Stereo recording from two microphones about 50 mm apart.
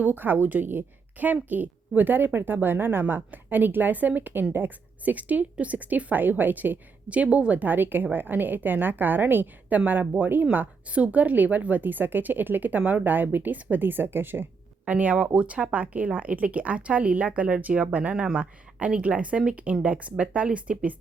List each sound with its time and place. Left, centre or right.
0.0 s speech: right
14.8 s speech: right